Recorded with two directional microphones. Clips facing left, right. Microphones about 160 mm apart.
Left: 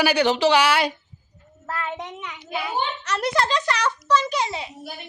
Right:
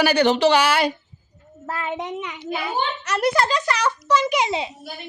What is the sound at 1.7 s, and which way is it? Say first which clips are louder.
A child's voice: right 3 dB; 15° right (ahead or behind).